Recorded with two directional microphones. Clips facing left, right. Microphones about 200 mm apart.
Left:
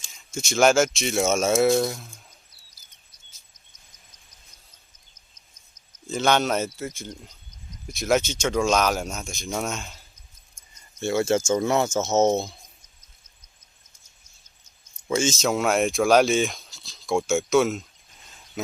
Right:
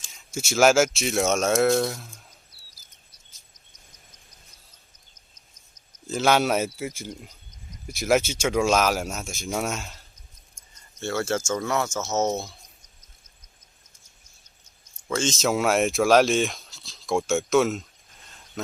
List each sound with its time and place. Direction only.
0.0 s speech: 5° right (ahead or behind)
6.1 s speech: 5° right (ahead or behind)
11.0 s speech: 15° left (ahead or behind)
15.0 s speech: 10° left (ahead or behind)